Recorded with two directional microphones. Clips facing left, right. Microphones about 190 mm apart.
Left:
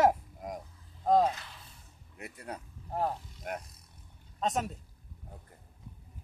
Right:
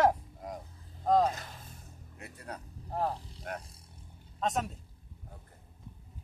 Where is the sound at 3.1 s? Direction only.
35° right (ahead or behind).